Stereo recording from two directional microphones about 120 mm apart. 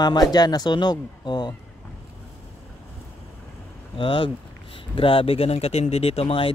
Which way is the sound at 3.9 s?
45° left (ahead or behind).